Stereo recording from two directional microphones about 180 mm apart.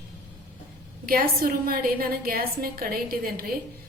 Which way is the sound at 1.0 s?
55° right (ahead or behind).